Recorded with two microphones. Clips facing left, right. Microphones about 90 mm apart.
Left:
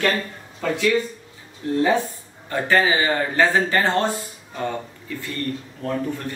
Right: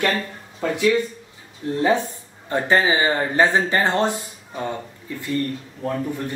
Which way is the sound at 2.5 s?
25° right (ahead or behind).